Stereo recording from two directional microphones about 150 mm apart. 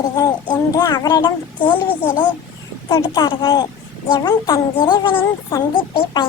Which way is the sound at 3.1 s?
30° left (ahead or behind).